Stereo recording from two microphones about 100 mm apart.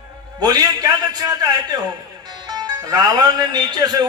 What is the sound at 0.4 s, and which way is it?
A man's voice, 40° right (ahead or behind).